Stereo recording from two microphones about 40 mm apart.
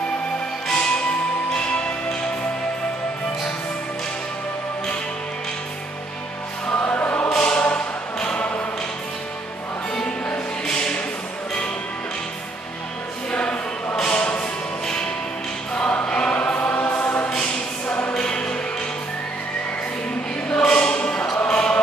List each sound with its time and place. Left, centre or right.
1.5 s music: left
6.7 s music: left
7.3 s choir: left
7.6 s music: left
10.0 s music: left
13.3 s choir: left
14.0 s music: left
15.7 s choir: left
16.5 s choir: left
17.8 s music: left
18.1 s music: left
20.4 s music: left
21.5 s basketball bounce: left